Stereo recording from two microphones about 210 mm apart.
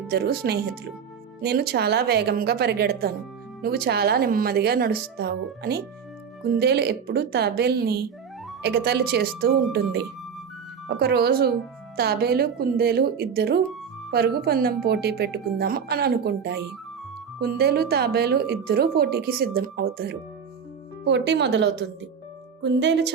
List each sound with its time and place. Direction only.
0.1 s speech: 50° right (ahead or behind)